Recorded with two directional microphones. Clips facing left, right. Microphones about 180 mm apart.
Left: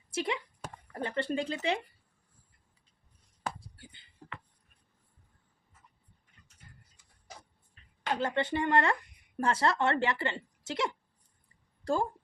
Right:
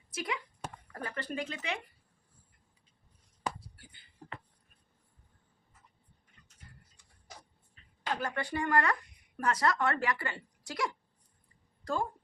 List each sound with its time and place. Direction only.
0.1 s speech: 25° left (ahead or behind)
8.1 s speech: 25° left (ahead or behind)